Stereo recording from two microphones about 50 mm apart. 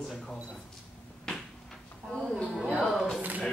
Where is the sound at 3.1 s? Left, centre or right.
Right.